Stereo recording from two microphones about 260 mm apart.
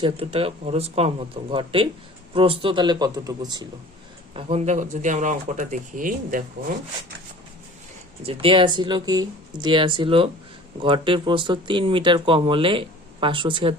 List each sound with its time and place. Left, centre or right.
0.0 s speech: right
8.3 s speech: right